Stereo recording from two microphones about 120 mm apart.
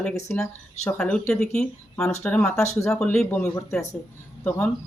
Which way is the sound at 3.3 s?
25° left (ahead or behind).